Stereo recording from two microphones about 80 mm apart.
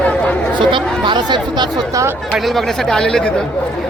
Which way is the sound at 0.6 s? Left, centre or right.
Right.